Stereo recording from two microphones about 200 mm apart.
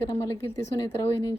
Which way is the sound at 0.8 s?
25° left (ahead or behind).